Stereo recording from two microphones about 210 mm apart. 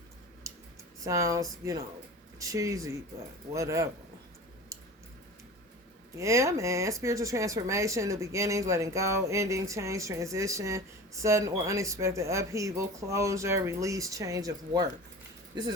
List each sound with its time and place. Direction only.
1.0 s speech: 15° right (ahead or behind)
6.1 s speech: 15° right (ahead or behind)